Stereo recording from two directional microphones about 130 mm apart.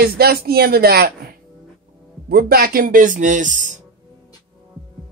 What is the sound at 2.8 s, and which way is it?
Speech, 90° right.